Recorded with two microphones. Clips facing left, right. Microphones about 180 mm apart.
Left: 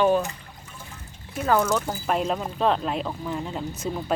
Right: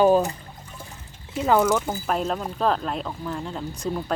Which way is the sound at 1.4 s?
15° right (ahead or behind).